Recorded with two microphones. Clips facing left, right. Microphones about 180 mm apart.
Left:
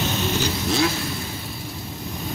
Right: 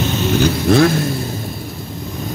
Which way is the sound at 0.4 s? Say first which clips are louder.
Right 12 dB; 55° right (ahead or behind).